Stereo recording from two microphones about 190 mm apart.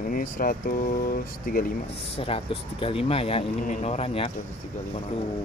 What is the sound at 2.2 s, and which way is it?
Speech, 30° left (ahead or behind).